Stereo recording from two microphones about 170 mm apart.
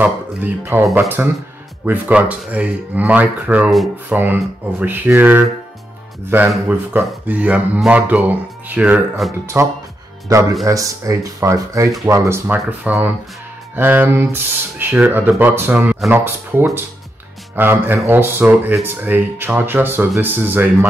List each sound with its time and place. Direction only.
0.0 s speech: 10° right (ahead or behind)
6.5 s speech: 10° right (ahead or behind)
9.6 s speech: 15° right (ahead or behind)